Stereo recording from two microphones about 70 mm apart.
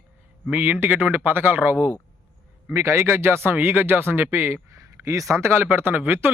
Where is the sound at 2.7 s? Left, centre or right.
Right.